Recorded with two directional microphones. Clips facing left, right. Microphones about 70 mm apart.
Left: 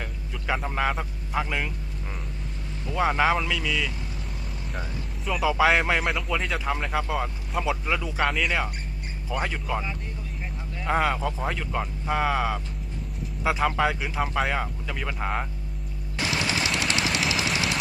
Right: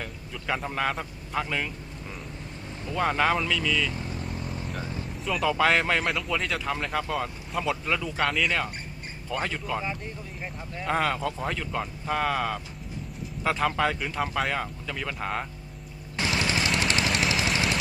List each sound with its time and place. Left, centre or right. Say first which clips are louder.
0.0 s a man's voice: left 1 dB; centre
3.9 s vehicle: right 4 dB; right
5.2 s speech: left 2 dB; centre
10.8 s speech: left 2 dB; centre
16.1 s machine gun: even; right
16.6 s a sound: even; right